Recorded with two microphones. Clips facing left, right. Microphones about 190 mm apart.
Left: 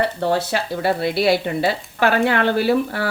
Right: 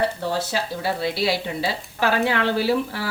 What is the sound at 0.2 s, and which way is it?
Speech, 60° left (ahead or behind).